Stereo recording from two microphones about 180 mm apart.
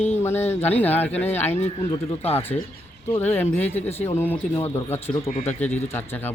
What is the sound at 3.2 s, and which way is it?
Speech, 10° left (ahead or behind).